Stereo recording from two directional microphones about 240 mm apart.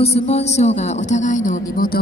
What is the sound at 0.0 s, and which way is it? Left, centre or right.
Speech, left.